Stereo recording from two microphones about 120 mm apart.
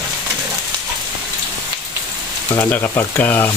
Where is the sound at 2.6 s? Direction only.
15° left (ahead or behind).